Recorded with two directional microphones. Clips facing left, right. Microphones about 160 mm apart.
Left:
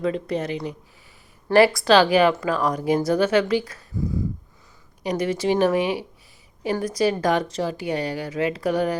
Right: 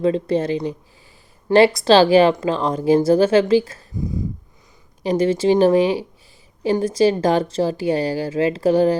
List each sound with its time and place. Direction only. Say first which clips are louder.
0.0 s a woman's voice: right 6 dB; 30° right (ahead or behind)
5.0 s a woman's voice: right 6 dB; 30° right (ahead or behind)